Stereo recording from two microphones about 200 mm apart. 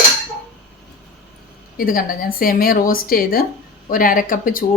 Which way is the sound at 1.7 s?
45° left (ahead or behind).